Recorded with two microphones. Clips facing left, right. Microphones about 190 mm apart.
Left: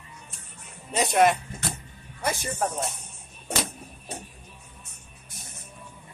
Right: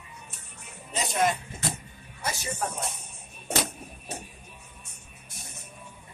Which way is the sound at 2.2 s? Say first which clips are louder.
Left 5 dB; 55° left (ahead or behind).